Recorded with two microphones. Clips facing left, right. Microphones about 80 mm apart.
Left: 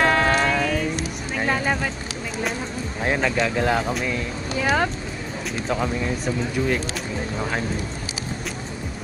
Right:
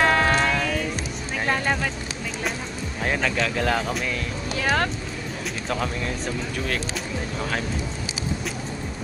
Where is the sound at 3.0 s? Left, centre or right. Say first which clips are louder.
Left 2 dB; centre.